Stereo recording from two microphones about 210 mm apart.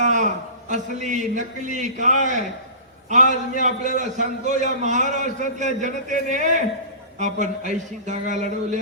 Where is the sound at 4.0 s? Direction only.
35° right (ahead or behind).